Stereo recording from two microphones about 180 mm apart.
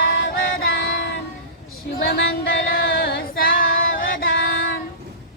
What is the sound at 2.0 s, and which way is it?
Female singing, 60° left (ahead or behind).